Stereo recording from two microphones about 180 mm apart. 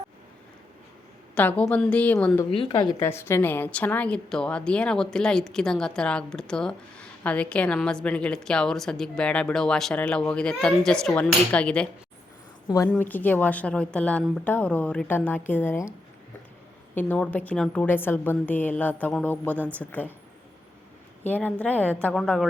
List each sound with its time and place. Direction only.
1.4 s a woman's voice: 10° left (ahead or behind)
2.5 s a woman's voice: 25° left (ahead or behind)
3.0 s a woman's voice: 15° left (ahead or behind)
12.6 s a woman's voice: 20° left (ahead or behind)
21.2 s a woman's voice: 10° left (ahead or behind)